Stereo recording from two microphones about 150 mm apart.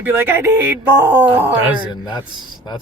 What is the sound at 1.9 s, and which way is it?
Speech, 30° left (ahead or behind).